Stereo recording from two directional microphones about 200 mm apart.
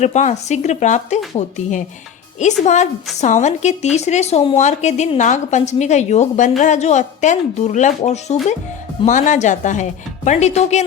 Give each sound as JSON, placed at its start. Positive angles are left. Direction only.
{"t": 0.0, "sound": "a woman's voice", "side_deg": 35}